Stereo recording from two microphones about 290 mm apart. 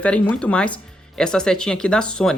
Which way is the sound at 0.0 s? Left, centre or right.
Centre.